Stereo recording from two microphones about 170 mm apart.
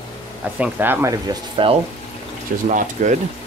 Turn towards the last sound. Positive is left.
turn(degrees=-45)  # may be behind; listen again after turning